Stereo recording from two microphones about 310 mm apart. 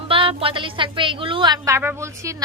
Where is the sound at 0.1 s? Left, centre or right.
Centre.